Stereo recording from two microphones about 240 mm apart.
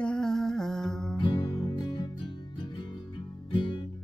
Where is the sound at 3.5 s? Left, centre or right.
Left.